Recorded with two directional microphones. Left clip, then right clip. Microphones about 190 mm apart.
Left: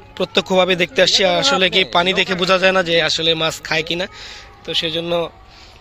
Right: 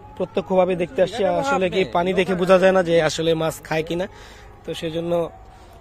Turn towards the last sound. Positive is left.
turn(degrees=-10)  # may be behind; listen again after turning